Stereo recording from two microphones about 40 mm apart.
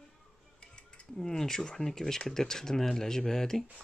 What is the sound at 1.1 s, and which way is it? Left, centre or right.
Speech, centre.